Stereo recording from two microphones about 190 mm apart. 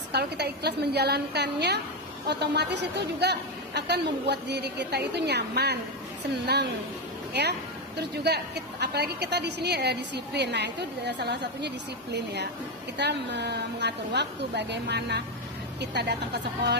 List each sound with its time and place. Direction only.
0.1 s a woman's voice: 60° right (ahead or behind)
7.9 s a woman's voice: 60° right (ahead or behind)